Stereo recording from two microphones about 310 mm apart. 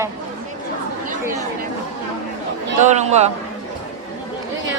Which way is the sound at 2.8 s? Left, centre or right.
Right.